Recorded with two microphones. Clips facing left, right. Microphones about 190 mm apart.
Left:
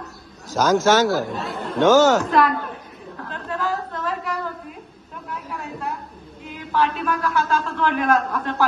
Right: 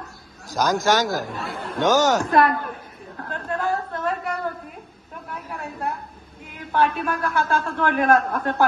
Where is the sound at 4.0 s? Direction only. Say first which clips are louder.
Right 1 dB; 55° right (ahead or behind).